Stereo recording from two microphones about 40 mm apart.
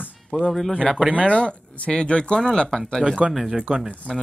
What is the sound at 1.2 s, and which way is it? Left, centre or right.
Speech, left.